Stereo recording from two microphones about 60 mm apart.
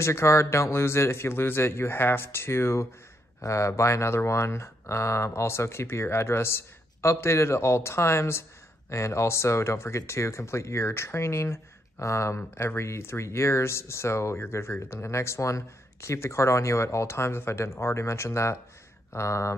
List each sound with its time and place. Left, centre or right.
0.0 s speech: left
12.4 s speech: left